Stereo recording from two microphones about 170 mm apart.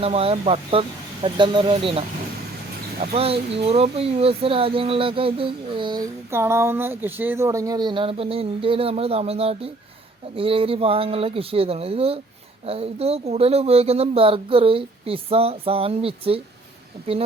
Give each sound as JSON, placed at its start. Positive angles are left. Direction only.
{"t": 0.0, "sound": "speech", "side_deg": -35}
{"t": 6.3, "sound": "speech", "side_deg": -15}